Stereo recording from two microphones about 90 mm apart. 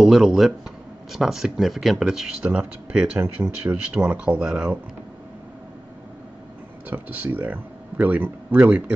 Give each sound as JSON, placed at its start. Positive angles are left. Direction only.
{"t": 0.0, "sound": "speech", "side_deg": -5}
{"t": 6.9, "sound": "speech", "side_deg": -20}